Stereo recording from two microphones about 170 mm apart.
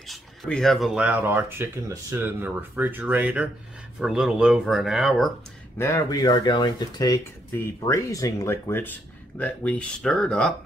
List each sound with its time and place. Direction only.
0.0 s speech: centre (ahead or behind)
5.8 s speech: 15° left (ahead or behind)